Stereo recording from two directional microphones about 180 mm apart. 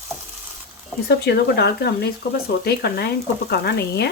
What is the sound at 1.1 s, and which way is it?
Speech, 65° left (ahead or behind).